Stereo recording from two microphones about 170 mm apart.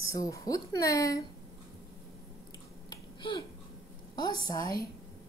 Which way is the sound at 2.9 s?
25° left (ahead or behind).